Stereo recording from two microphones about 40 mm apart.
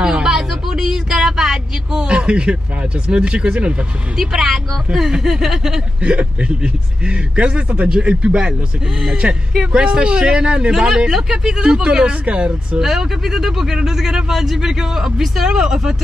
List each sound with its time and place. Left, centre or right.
0.0 s a sound: centre
2.0 s a man's voice: right
4.2 s speech: centre
6.1 s a man's voice: right
10.7 s a man's voice: centre; by 12.5 s right
12.7 s speech: centre